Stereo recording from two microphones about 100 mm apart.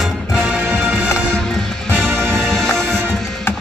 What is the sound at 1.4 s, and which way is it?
Music, 5° left (ahead or behind).